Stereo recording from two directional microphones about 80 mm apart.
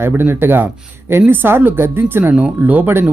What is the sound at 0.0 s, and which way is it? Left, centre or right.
Speech, right.